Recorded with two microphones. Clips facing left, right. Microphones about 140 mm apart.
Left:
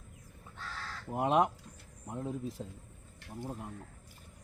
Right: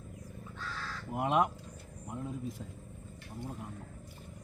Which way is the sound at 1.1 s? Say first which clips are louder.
Left 1 dB; 30° left (ahead or behind).